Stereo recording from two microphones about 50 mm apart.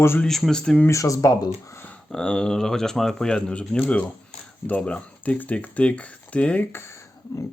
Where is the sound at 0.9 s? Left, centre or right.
Left.